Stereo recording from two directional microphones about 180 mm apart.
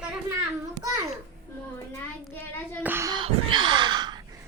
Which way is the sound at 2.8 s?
15° right (ahead or behind).